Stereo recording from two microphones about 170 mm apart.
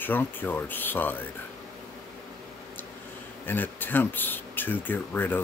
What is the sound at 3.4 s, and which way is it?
Speech, 10° left (ahead or behind).